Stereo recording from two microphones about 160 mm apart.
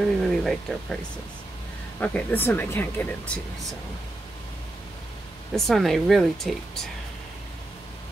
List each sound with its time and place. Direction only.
0.2 s a sound: centre (ahead or behind)
2.0 s speech: 10° left (ahead or behind)
5.5 s speech: centre (ahead or behind)